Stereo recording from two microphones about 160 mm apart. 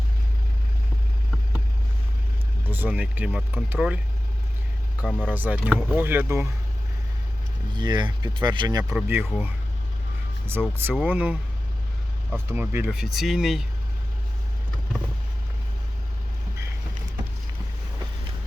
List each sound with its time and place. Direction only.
2.6 s speech: 10° right (ahead or behind)
5.2 s speech: 10° right (ahead or behind)
7.7 s speech: 25° right (ahead or behind)
9.0 s speech: 15° right (ahead or behind)